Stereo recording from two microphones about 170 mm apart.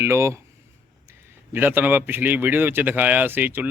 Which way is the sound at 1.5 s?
10° right (ahead or behind).